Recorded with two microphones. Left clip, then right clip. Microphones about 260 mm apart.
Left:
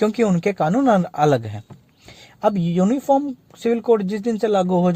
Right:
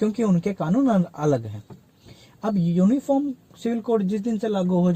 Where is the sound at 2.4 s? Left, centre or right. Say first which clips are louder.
Left 5 dB; left.